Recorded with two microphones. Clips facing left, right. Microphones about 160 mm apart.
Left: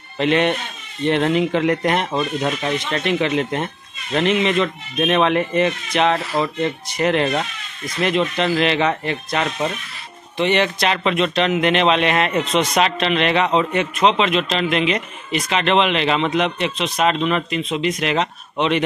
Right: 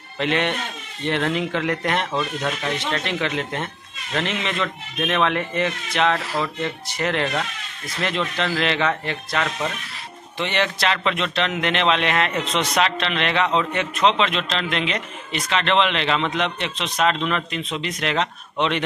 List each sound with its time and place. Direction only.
0.2 s a man's voice: 20° left (ahead or behind)